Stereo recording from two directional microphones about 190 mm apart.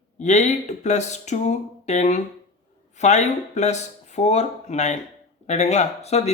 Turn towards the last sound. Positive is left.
turn(degrees=35)  # may be behind; listen again after turning